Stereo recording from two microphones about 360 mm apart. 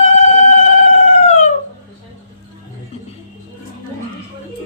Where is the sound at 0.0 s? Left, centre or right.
Centre.